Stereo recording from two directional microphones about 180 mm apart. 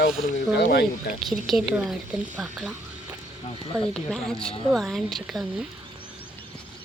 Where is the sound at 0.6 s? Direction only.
55° left (ahead or behind).